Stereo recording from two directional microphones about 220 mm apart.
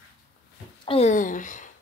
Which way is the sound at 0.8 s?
25° left (ahead or behind).